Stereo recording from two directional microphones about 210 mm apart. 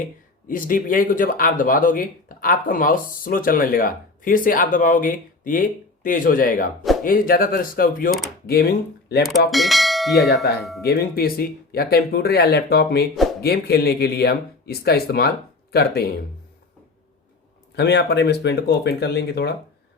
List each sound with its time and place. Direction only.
0.0 s speech: 40° left (ahead or behind)
9.5 s speech: centre (ahead or behind)
10.3 s speech: 50° left (ahead or behind)
10.6 s speech: centre (ahead or behind)
10.8 s speech: 45° left (ahead or behind)
17.7 s speech: 55° left (ahead or behind)